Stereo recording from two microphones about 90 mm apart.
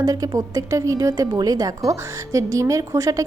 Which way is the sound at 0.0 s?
40° right (ahead or behind).